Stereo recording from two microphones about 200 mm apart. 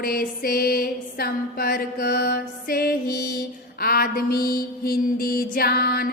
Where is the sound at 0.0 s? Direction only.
45° left (ahead or behind).